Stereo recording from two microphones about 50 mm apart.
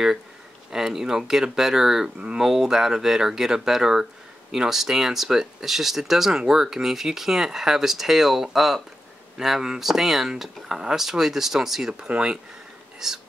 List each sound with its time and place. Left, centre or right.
0.7 s speech: centre
2.1 s speech: centre
12.1 s speech: centre